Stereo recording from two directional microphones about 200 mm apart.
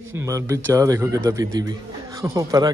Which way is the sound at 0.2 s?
15° right (ahead or behind).